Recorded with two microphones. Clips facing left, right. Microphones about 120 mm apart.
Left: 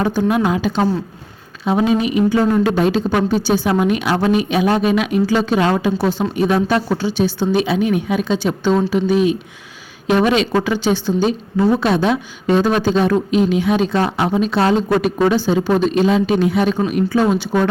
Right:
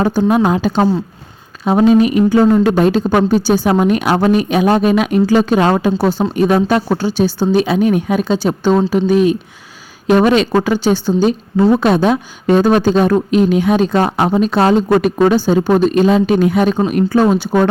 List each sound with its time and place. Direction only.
0.0 s a woman's voice: 40° right (ahead or behind)